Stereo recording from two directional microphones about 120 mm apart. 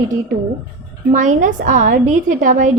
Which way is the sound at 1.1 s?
90° right.